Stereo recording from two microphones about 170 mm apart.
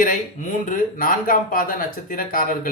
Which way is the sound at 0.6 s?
50° left (ahead or behind).